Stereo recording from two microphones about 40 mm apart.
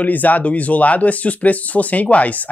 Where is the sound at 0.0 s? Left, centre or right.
Left.